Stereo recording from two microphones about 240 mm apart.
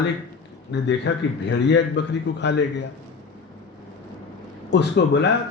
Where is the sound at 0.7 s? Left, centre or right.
Left.